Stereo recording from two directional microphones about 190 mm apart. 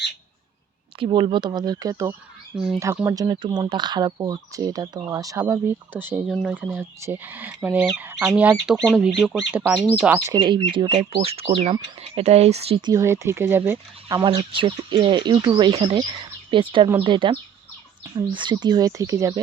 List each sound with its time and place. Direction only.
0.9 s speech: 25° right (ahead or behind); by 10.3 s 10° right (ahead or behind)
10.3 s speech: 25° right (ahead or behind)
12.9 s speech: 15° right (ahead or behind)
14.2 s speech: 30° right (ahead or behind)